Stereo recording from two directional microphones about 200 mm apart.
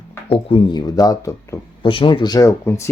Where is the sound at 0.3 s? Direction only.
25° left (ahead or behind).